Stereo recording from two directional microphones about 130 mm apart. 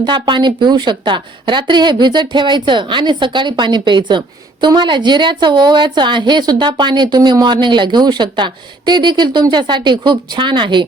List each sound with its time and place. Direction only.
0.0 s a woman's voice: 35° right (ahead or behind)